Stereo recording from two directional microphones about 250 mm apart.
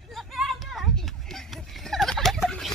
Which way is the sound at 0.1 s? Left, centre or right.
Centre.